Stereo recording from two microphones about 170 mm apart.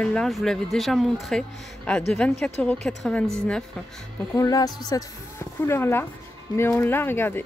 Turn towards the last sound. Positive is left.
turn(degrees=10)  # may be behind; listen again after turning